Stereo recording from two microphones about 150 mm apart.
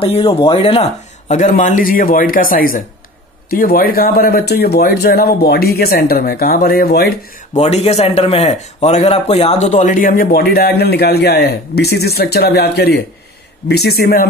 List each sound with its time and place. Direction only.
0.0 s speech: 40° left (ahead or behind)
1.3 s a man's voice: 55° left (ahead or behind)
3.4 s speech: 80° left
7.5 s a man's voice: 45° left (ahead or behind); by 14.2 s 90° left